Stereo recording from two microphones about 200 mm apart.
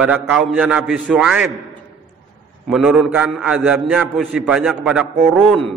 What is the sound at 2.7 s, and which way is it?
A man's voice, 5° right (ahead or behind).